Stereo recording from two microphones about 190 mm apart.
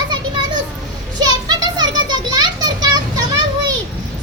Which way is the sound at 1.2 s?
20° right (ahead or behind).